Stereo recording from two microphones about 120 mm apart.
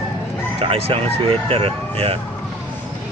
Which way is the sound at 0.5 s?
50° right (ahead or behind).